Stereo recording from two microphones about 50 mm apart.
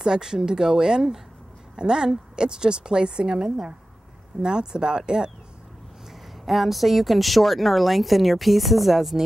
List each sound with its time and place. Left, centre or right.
0.0 s a woman's voice: centre
6.4 s a woman's voice: centre